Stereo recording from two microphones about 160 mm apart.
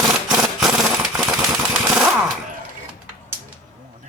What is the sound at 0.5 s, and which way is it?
Machine gun, centre (ahead or behind).